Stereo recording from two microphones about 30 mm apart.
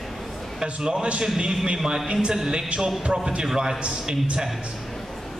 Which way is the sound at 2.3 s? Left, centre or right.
Right.